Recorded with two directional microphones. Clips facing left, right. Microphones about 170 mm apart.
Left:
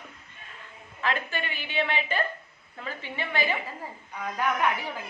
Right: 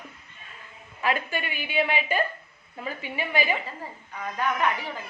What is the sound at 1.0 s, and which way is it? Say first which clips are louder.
A woman's voice: right 3 dB; 10° right (ahead or behind).